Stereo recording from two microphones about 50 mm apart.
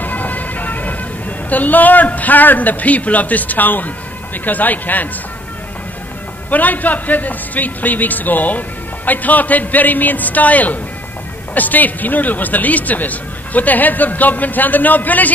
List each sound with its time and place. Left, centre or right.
0.0 s vehicle: left
1.5 s a man's voice: left
6.5 s a man's voice: left